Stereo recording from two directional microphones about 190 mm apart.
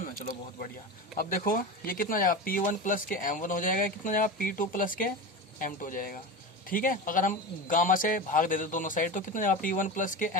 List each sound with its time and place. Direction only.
1.2 s speech: 45° left (ahead or behind)